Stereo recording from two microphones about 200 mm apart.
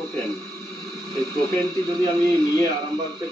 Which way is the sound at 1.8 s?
15° left (ahead or behind).